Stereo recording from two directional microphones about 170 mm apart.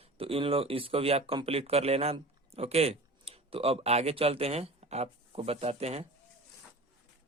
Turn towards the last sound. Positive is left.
turn(degrees=-35)  # may be behind; listen again after turning